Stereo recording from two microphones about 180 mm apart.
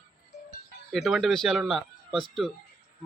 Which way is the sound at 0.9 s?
Centre (ahead or behind).